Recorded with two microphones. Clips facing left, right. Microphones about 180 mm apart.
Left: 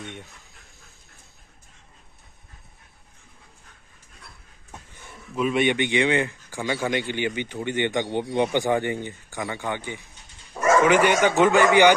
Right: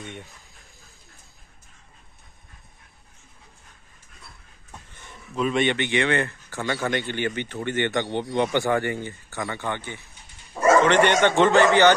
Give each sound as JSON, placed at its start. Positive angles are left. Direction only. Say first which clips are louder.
{"t": 4.6, "sound": "speech", "louder": "left 1 dB", "side_deg": 10}